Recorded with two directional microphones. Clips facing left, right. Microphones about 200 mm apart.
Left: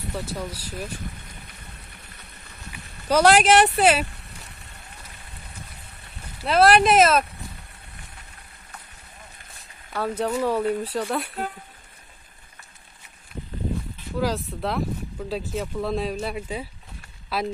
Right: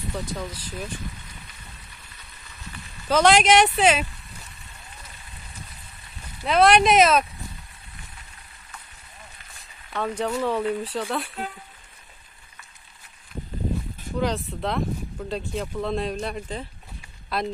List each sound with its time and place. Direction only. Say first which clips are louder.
0.2 s speech: even; 10° left (ahead or behind)
1.2 s a sound: left 1 dB; 60° left (ahead or behind)
3.1 s speech: left 1 dB; 10° left (ahead or behind)
4.0 s a sound: left 1 dB; 65° left (ahead or behind)
6.4 s speech: even; centre (ahead or behind)
9.9 s speech: left 1 dB; 5° left (ahead or behind)
14.1 s speech: even; centre (ahead or behind)